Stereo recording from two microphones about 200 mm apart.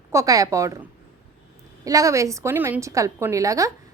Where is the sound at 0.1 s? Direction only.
15° right (ahead or behind).